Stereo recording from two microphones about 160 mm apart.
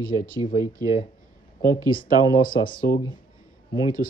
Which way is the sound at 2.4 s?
60° left (ahead or behind).